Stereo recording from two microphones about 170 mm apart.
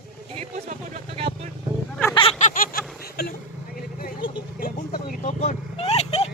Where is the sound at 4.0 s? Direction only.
55° left (ahead or behind).